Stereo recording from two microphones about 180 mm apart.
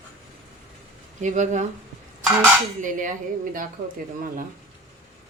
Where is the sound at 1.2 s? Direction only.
40° right (ahead or behind).